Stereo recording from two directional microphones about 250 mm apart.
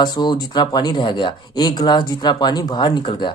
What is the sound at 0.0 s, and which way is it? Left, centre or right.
Speech, centre.